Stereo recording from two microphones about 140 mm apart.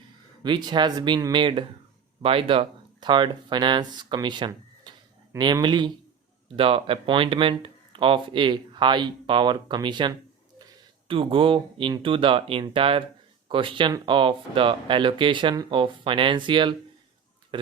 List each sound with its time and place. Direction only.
0.4 s speech: 35° right (ahead or behind)